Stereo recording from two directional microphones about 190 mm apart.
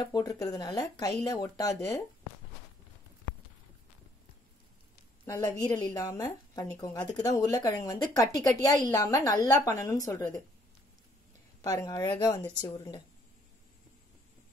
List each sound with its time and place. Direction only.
0.0 s a woman's voice: 20° left (ahead or behind)
5.2 s a woman's voice: 15° left (ahead or behind)
11.6 s a woman's voice: 20° left (ahead or behind)